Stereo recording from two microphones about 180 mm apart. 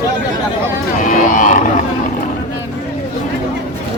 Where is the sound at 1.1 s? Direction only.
45° left (ahead or behind).